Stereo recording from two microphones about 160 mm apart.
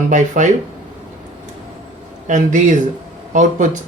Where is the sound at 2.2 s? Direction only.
50° right (ahead or behind).